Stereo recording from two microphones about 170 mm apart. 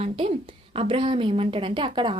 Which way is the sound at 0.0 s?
35° right (ahead or behind).